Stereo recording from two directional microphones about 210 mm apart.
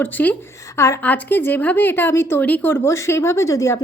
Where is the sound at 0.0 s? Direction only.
10° left (ahead or behind).